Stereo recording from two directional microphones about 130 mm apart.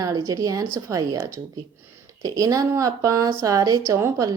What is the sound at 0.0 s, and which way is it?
Speech, 25° right (ahead or behind).